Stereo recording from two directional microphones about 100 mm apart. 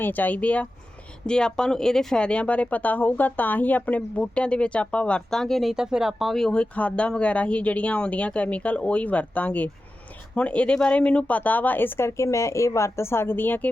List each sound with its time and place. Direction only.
0.0 s speech: 15° left (ahead or behind)